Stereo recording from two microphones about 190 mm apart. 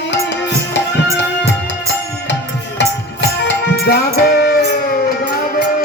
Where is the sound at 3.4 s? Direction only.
60° left (ahead or behind).